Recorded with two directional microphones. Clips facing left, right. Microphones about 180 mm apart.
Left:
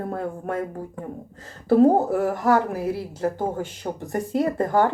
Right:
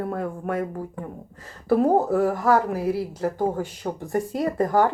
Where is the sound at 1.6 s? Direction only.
30° left (ahead or behind).